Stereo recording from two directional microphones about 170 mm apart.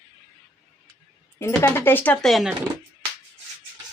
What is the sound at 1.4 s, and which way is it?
Speech, 15° left (ahead or behind).